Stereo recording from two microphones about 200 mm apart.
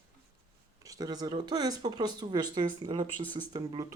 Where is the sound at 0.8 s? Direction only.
20° right (ahead or behind).